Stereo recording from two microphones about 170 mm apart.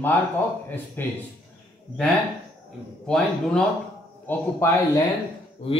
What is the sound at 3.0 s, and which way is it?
Speech, 5° left (ahead or behind).